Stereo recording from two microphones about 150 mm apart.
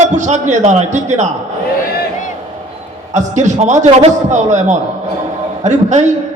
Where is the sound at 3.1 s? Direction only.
50° right (ahead or behind).